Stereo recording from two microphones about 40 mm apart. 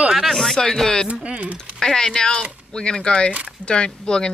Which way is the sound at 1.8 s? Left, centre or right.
Centre.